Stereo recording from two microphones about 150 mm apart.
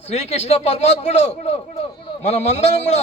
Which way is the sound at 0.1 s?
45° left (ahead or behind).